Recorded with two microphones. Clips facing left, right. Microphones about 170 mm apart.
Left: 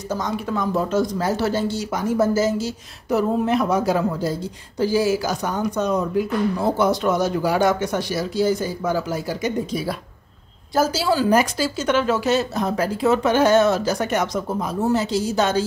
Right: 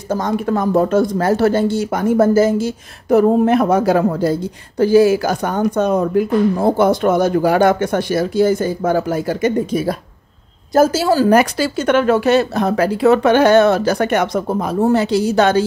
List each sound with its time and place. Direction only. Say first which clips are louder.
0.1 s a woman's voice: right 7 dB; 55° right (ahead or behind)
11.3 s speech: right 5 dB; 65° right (ahead or behind)